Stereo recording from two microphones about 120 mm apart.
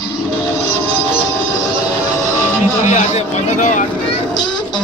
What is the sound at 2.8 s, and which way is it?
Speech, 75° left (ahead or behind).